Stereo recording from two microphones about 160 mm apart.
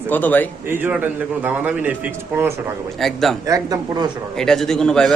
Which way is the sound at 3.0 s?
Centre (ahead or behind).